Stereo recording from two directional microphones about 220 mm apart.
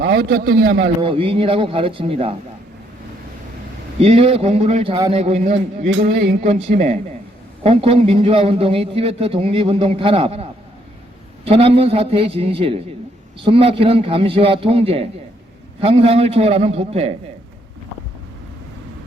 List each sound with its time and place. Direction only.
0.0 s a man's voice: 45° right (ahead or behind)
1.0 s a man's voice: 25° right (ahead or behind)
4.0 s a man's voice: 25° right (ahead or behind)
6.1 s a man's voice: 50° right (ahead or behind)
6.4 s a man's voice: 25° right (ahead or behind)
11.4 s a man's voice: 25° right (ahead or behind)